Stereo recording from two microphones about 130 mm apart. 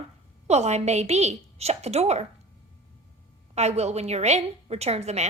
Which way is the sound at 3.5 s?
55° right (ahead or behind).